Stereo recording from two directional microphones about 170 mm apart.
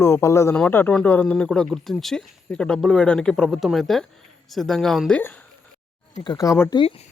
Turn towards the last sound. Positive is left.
turn(degrees=30)  # may be behind; listen again after turning